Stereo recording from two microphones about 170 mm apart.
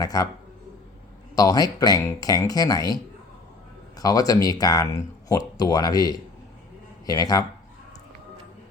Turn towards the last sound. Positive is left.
turn(degrees=20)  # may be behind; listen again after turning